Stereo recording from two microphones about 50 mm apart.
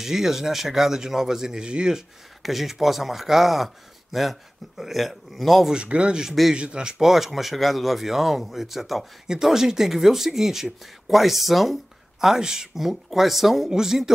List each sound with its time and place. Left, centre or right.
0.0 s speech: centre
2.4 s speech: centre
5.7 s speech: right